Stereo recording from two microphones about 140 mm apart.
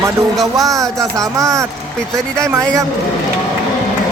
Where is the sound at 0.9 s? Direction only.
25° right (ahead or behind).